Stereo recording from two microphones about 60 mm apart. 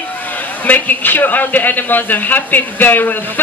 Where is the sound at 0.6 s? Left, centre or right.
Left.